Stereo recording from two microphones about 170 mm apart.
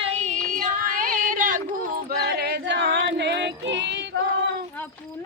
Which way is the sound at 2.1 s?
70° right (ahead or behind).